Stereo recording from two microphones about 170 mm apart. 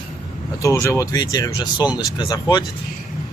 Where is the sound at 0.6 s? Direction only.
20° left (ahead or behind).